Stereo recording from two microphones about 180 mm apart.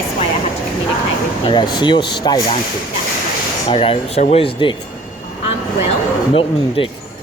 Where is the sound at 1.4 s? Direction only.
25° left (ahead or behind).